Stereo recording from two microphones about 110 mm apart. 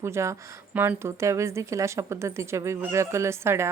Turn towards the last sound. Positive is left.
turn(degrees=-25)  # may be behind; listen again after turning